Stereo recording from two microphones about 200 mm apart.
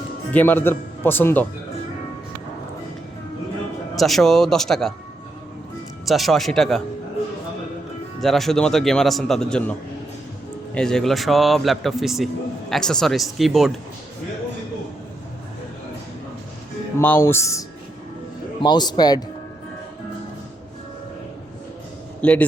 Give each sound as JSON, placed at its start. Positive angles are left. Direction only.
{"t": 0.3, "sound": "speech", "side_deg": 10}
{"t": 3.9, "sound": "a man's voice", "side_deg": 0}
{"t": 6.1, "sound": "a man's voice", "side_deg": 0}
{"t": 8.2, "sound": "a man's voice", "side_deg": 0}
{"t": 10.8, "sound": "a man's voice", "side_deg": 5}
{"t": 17.0, "sound": "a man's voice", "side_deg": 10}
{"t": 22.2, "sound": "a man's voice", "side_deg": 5}